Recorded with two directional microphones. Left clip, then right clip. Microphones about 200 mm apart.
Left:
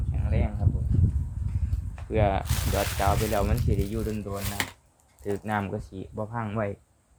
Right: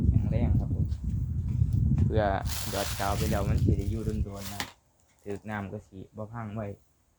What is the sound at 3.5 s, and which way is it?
Speech, 25° left (ahead or behind).